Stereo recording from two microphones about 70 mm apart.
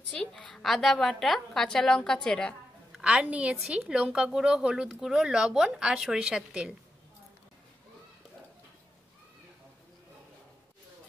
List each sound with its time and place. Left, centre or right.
0.1 s a woman's voice: centre
3.0 s a woman's voice: centre